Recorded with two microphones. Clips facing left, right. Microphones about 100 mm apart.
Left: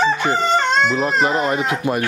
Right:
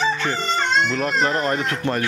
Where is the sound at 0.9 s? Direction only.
15° left (ahead or behind).